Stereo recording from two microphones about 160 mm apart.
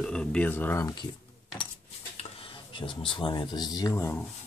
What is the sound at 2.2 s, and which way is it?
Speech, 35° left (ahead or behind).